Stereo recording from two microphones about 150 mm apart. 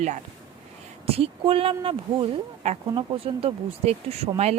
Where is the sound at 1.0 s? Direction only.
40° right (ahead or behind).